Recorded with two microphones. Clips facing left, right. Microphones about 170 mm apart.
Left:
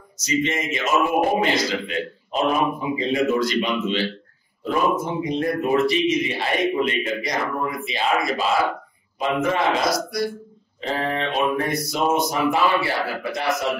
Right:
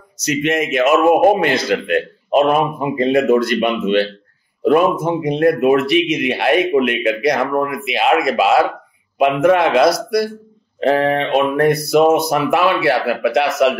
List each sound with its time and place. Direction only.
0.2 s a man's voice: 65° right (ahead or behind)